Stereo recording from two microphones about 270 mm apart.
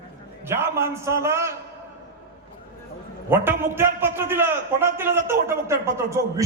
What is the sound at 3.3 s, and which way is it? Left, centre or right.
A man's voice, centre.